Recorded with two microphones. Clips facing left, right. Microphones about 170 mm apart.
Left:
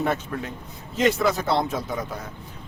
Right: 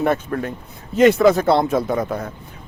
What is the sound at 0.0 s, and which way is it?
Speech, 55° right (ahead or behind).